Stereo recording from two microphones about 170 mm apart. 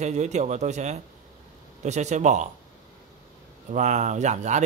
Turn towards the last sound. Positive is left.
turn(degrees=-45)  # may be behind; listen again after turning